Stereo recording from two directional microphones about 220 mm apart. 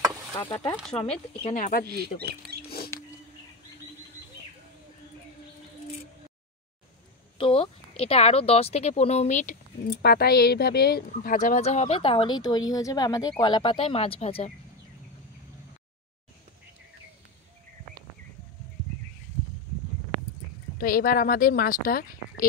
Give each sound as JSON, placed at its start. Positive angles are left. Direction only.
{"t": 0.9, "sound": "speech", "side_deg": 25}
{"t": 1.9, "sound": "speech", "side_deg": -45}
{"t": 7.3, "sound": "speech", "side_deg": 25}
{"t": 20.7, "sound": "speech", "side_deg": 40}